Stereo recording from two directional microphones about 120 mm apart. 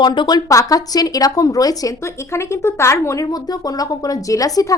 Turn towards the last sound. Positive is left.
turn(degrees=30)  # may be behind; listen again after turning